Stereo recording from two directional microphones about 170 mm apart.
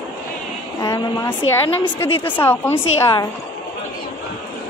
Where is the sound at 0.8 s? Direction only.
20° left (ahead or behind).